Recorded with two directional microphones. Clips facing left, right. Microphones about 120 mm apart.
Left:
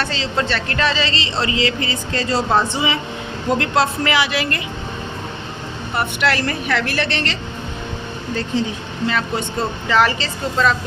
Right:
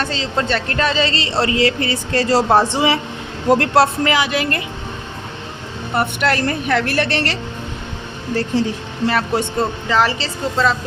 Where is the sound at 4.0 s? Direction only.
40° right (ahead or behind).